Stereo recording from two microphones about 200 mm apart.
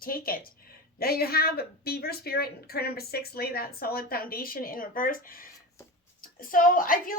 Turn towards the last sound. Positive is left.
turn(degrees=45)  # may be behind; listen again after turning